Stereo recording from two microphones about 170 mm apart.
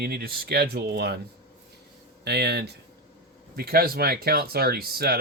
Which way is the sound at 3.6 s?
65° right (ahead or behind).